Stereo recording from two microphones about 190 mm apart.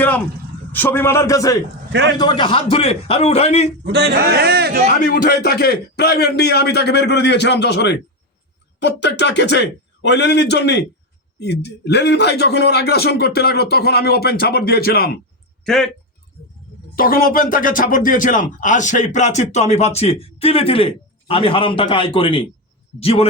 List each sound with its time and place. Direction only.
0.7 s a man's voice: 10° left (ahead or behind); by 3.7 s 35° left (ahead or behind)
3.9 s a man's voice: 60° right (ahead or behind)
4.9 s a man's voice: 50° left (ahead or behind)
15.6 s speech: 5° left (ahead or behind)
16.9 s speech: 50° left (ahead or behind); by 23.2 s 30° left (ahead or behind)